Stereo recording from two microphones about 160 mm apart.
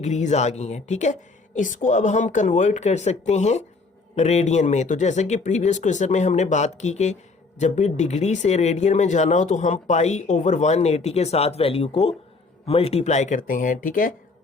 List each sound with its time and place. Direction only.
0.0 s speech: 45° left (ahead or behind)